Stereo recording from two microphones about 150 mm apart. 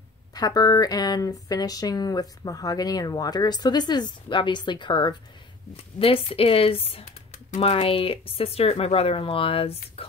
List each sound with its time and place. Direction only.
0.3 s speech: 25° left (ahead or behind)